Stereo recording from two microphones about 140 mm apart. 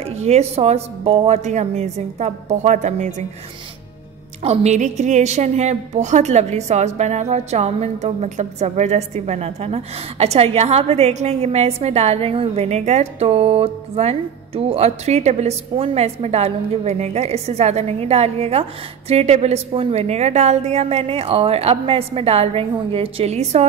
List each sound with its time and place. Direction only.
0.0 s a woman's voice: 50° right (ahead or behind)
4.4 s a woman's voice: 50° right (ahead or behind)